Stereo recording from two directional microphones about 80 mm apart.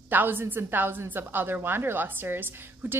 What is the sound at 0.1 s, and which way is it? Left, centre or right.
A woman's voice, right.